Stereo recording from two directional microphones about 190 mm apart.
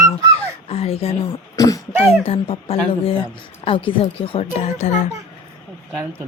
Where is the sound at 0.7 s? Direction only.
30° left (ahead or behind).